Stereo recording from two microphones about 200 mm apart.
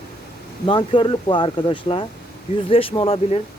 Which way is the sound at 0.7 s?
25° left (ahead or behind).